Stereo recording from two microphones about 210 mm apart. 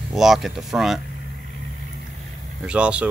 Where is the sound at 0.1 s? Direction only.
Centre (ahead or behind).